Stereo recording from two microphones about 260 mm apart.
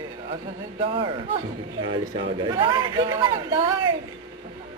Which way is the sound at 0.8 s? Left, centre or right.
Right.